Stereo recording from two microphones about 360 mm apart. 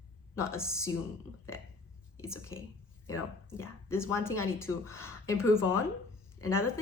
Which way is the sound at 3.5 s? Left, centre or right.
Centre.